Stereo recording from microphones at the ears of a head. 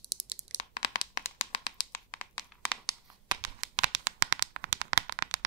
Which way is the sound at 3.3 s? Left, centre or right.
Right.